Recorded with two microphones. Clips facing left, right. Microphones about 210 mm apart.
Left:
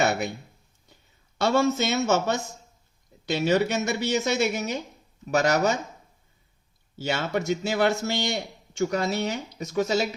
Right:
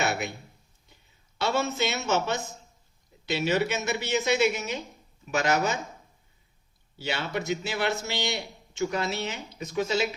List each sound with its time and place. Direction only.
1.4 s a woman's voice: 45° left (ahead or behind)
3.3 s a woman's voice: 45° left (ahead or behind)
7.0 s a woman's voice: 45° left (ahead or behind)